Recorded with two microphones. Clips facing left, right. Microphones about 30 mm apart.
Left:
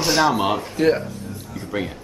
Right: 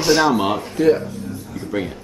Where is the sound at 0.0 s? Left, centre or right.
Centre.